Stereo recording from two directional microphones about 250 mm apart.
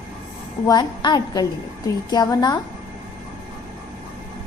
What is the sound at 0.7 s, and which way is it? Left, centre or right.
A woman's voice, centre.